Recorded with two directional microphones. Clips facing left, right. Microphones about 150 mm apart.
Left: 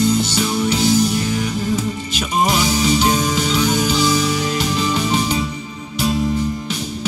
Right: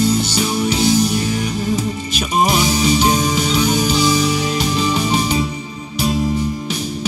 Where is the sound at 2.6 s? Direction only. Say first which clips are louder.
Right 1 dB; 20° right (ahead or behind).